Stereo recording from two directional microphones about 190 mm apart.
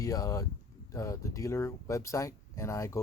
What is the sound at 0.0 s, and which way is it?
Speech, 15° left (ahead or behind).